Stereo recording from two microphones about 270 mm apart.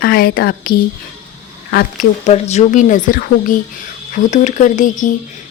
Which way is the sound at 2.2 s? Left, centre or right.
Left.